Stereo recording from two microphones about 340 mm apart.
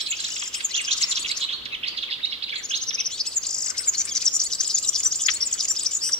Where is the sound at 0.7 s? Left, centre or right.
Centre.